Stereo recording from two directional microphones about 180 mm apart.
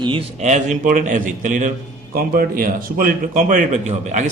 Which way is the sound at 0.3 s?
40° right (ahead or behind).